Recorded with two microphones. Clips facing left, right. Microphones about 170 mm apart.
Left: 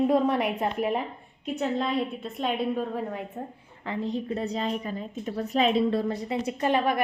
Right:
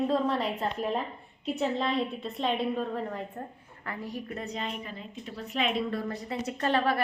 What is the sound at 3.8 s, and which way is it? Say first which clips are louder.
A woman's voice: left 7 dB; 20° left (ahead or behind).